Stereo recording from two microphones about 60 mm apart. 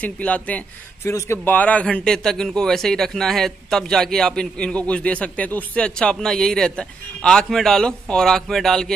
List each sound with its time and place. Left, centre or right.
0.0 s a man's voice: left
2.0 s a man's voice: centre
4.6 s a man's voice: centre
5.9 s a man's voice: centre